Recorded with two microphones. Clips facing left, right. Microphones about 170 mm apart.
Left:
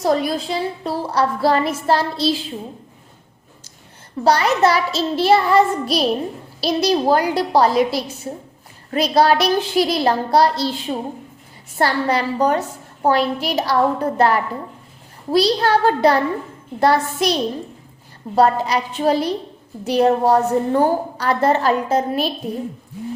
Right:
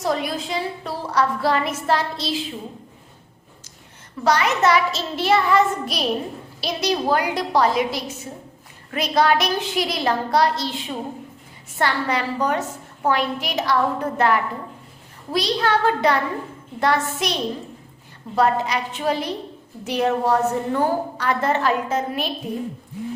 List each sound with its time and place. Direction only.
0.0 s a woman's voice: 35° left (ahead or behind)
4.2 s a woman's voice: 30° left (ahead or behind)
18.3 s a woman's voice: 35° left (ahead or behind)